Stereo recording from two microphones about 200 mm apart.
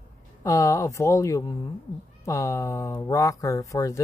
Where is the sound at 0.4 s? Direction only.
15° left (ahead or behind).